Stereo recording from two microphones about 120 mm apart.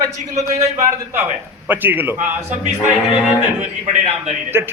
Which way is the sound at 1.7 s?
15° right (ahead or behind).